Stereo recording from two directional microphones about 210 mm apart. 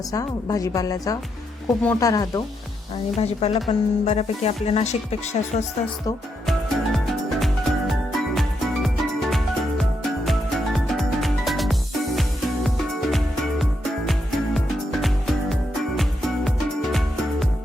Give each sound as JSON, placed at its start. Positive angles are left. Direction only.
{"t": 0.1, "sound": "a woman's voice", "side_deg": 15}
{"t": 1.6, "sound": "a woman's voice", "side_deg": 5}
{"t": 2.0, "sound": "a woman's voice", "side_deg": 15}
{"t": 6.4, "sound": "music", "side_deg": 0}